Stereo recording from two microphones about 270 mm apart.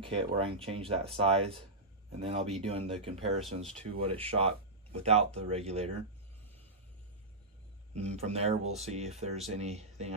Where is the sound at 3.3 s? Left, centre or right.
Centre.